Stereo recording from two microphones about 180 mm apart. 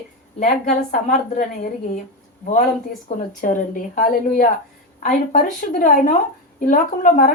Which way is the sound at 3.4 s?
45° left (ahead or behind).